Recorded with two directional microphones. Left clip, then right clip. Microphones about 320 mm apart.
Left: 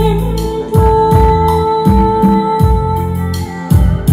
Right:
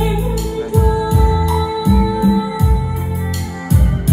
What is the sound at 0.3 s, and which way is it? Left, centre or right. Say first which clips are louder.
Music: left 4 dB; left.